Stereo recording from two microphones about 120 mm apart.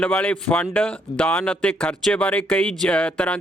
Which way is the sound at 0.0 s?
10° left (ahead or behind).